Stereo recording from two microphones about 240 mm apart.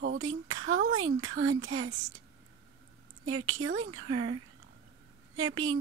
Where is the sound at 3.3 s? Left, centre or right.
Right.